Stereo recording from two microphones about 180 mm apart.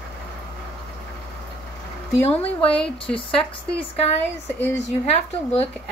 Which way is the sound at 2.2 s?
35° left (ahead or behind).